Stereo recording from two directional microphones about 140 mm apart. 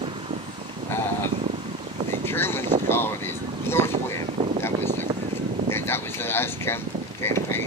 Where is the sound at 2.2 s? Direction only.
15° left (ahead or behind).